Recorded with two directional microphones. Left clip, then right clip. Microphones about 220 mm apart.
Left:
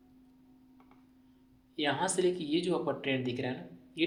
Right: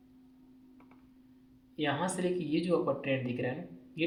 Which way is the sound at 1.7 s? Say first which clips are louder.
Left 2 dB; 35° left (ahead or behind).